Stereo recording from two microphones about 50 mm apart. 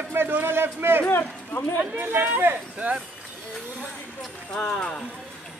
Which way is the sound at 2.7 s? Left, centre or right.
Right.